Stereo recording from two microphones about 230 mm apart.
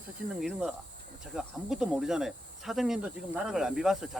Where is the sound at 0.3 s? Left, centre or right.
Centre.